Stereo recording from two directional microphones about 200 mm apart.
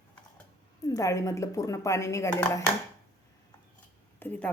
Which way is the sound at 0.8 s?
15° left (ahead or behind).